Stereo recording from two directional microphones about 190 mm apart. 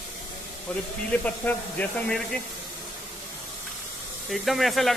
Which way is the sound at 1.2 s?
10° left (ahead or behind).